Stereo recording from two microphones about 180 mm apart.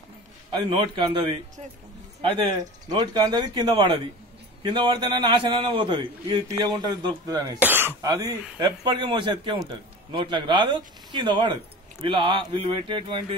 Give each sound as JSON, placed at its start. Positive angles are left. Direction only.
{"t": 0.6, "sound": "speech", "side_deg": -25}
{"t": 7.5, "sound": "speech", "side_deg": -10}